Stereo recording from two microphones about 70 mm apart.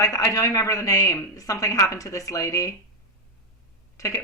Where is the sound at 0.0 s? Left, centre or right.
Left.